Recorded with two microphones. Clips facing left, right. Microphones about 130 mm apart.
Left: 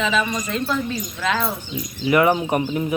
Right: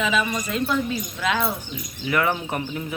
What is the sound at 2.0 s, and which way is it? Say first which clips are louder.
Speech: left 6 dB; 20° left (ahead or behind).